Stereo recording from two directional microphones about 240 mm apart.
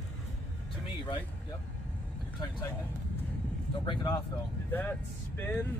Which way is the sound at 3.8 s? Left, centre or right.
Left.